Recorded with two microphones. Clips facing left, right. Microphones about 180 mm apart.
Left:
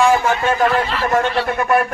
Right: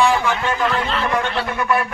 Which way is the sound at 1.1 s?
45° left (ahead or behind).